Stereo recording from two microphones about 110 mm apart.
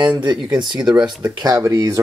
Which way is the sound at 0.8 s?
5° right (ahead or behind).